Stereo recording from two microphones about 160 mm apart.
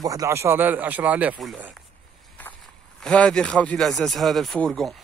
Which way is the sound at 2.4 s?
10° left (ahead or behind).